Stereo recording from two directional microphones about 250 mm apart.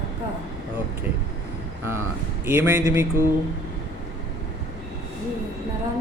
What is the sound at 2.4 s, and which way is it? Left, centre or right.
Mantra, centre.